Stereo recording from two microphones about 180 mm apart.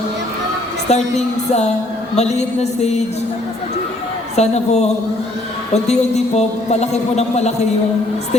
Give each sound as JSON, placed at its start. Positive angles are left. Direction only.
{"t": 0.9, "sound": "a man's voice", "side_deg": 40}
{"t": 4.4, "sound": "a man's voice", "side_deg": 35}